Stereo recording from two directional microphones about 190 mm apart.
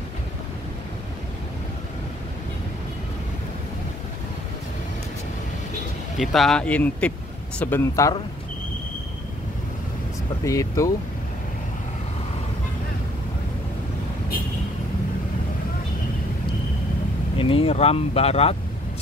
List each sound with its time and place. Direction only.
6.1 s speech: centre (ahead or behind); by 8.2 s 15° left (ahead or behind)
10.4 s speech: 15° left (ahead or behind)
17.4 s speech: 30° left (ahead or behind)